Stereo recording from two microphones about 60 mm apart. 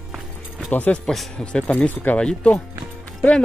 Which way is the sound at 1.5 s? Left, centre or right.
Centre.